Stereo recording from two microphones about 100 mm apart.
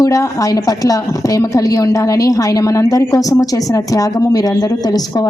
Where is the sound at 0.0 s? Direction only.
35° left (ahead or behind).